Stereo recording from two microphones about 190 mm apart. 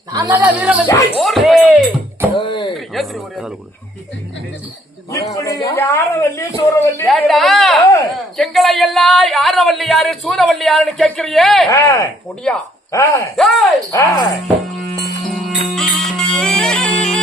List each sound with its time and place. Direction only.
0.1 s speech: 15° right (ahead or behind)
1.2 s music: centre (ahead or behind)
2.4 s a sound: 25° left (ahead or behind)
2.7 s a sound: centre (ahead or behind)
5.1 s a sound: 15° left (ahead or behind)
7.1 s a sound: centre (ahead or behind)
8.4 s speech: centre (ahead or behind)
11.7 s speech: 15° left (ahead or behind)
12.4 s speech: 5° left (ahead or behind)
12.9 s speech: 15° left (ahead or behind)
13.3 s speech: centre (ahead or behind)
13.9 s speech: 15° left (ahead or behind)
14.4 s music: centre (ahead or behind)